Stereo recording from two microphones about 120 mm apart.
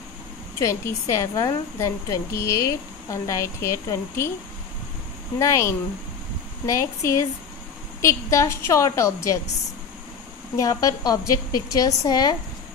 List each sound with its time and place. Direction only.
0.6 s a woman's voice: 25° left (ahead or behind)
5.4 s a woman's voice: 25° left (ahead or behind)
10.5 s a woman's voice: 30° left (ahead or behind)